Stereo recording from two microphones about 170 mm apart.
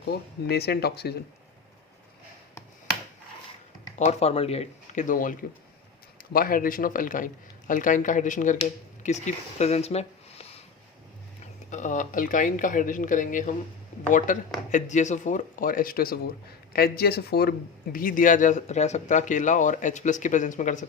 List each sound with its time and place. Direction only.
0.0 s speech: 75° left (ahead or behind)
3.9 s a man's voice: 40° left (ahead or behind)
11.7 s speech: 45° left (ahead or behind); by 17.5 s 70° left (ahead or behind)
17.9 s speech: 55° left (ahead or behind)